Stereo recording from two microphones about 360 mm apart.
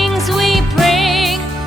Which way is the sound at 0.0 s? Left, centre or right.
Centre.